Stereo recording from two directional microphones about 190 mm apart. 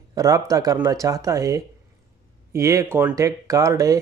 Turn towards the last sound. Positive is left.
turn(degrees=-15)  # may be behind; listen again after turning